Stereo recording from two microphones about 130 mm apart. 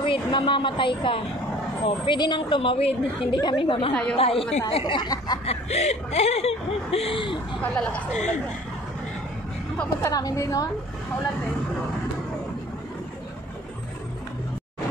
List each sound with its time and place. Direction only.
0.0 s a woman's voice: 40° left (ahead or behind)
3.9 s a woman's voice: 5° left (ahead or behind)
4.2 s a woman's voice: 45° left (ahead or behind)
5.4 s speech: 55° left (ahead or behind)
7.6 s a woman's voice: 10° left (ahead or behind)
10.0 s a woman's voice: 25° left (ahead or behind)